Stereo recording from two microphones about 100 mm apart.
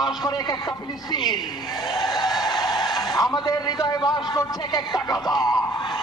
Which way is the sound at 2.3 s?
45° left (ahead or behind).